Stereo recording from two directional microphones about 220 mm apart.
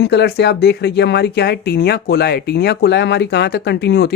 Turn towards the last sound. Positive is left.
turn(degrees=45)  # may be behind; listen again after turning